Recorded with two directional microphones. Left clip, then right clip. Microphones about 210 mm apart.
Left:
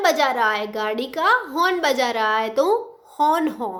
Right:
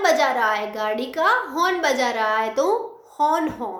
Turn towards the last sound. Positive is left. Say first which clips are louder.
# left 1 dB
turn(degrees=35)  # may be behind; listen again after turning